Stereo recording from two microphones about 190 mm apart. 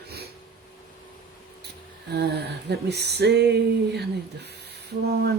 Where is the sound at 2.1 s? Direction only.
60° right (ahead or behind).